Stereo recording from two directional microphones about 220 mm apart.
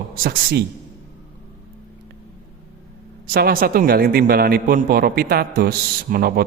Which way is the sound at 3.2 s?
45° right (ahead or behind).